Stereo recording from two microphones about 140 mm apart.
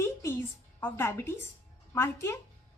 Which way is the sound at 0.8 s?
15° left (ahead or behind).